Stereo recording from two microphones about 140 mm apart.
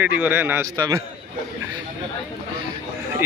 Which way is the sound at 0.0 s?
15° right (ahead or behind).